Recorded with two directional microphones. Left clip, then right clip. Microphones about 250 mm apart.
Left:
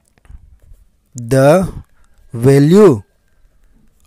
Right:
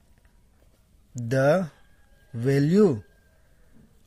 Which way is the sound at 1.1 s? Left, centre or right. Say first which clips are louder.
Left 12 dB; left.